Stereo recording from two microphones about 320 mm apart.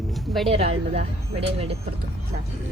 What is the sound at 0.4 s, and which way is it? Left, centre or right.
Speech, centre.